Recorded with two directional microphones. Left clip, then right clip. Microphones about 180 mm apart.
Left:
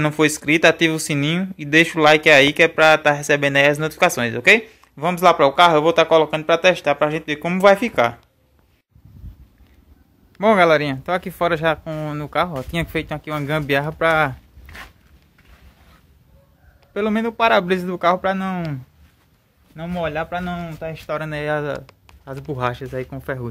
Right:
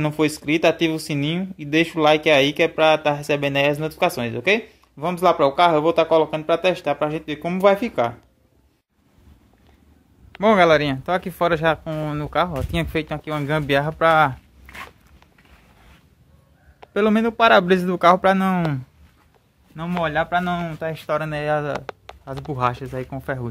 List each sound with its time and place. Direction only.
0.0 s speech: centre (ahead or behind)
10.4 s speech: centre (ahead or behind)
16.9 s speech: 15° right (ahead or behind)
19.7 s a man's voice: 20° right (ahead or behind)
21.2 s speech: 5° right (ahead or behind)